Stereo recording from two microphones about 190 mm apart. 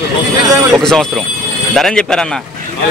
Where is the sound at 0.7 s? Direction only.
5° left (ahead or behind).